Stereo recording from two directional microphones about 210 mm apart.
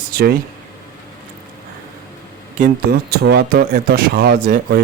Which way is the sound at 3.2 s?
50° right (ahead or behind).